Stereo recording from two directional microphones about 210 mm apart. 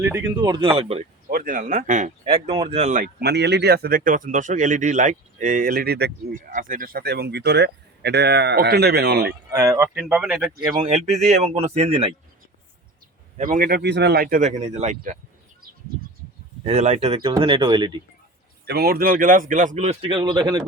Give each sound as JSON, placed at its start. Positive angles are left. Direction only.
{"t": 0.0, "sound": "speech", "side_deg": -15}
{"t": 1.3, "sound": "speech", "side_deg": -40}
{"t": 2.2, "sound": "speech", "side_deg": -25}
{"t": 9.5, "sound": "speech", "side_deg": -15}
{"t": 10.6, "sound": "speech", "side_deg": -20}
{"t": 10.8, "sound": "speech", "side_deg": -30}
{"t": 13.3, "sound": "speech", "side_deg": -40}
{"t": 16.6, "sound": "speech", "side_deg": -30}
{"t": 18.6, "sound": "speech", "side_deg": -50}